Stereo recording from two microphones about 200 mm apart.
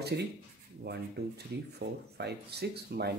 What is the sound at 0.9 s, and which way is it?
Speech, 55° right (ahead or behind).